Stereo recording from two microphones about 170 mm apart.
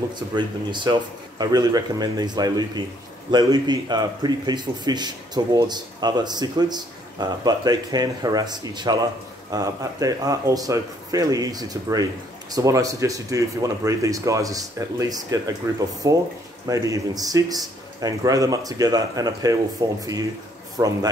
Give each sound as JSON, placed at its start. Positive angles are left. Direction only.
{"t": 0.3, "sound": "speech", "side_deg": -25}